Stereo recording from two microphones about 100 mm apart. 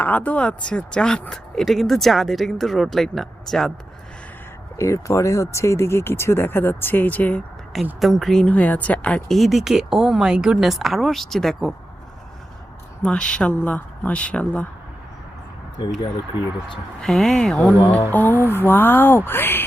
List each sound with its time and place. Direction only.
0.0 s a woman's voice: 15° left (ahead or behind)
4.8 s speech: 30° left (ahead or behind); by 7.4 s 15° left (ahead or behind)
7.9 s speech: centre (ahead or behind)
8.4 s a woman's voice: 15° left (ahead or behind)
9.3 s speech: centre (ahead or behind)
13.0 s a woman's voice: 10° left (ahead or behind)
17.0 s speech: 5° left (ahead or behind)
18.1 s speech: 20° left (ahead or behind)